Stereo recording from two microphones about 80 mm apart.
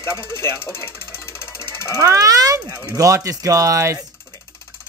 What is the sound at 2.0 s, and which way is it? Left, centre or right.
Speech, right.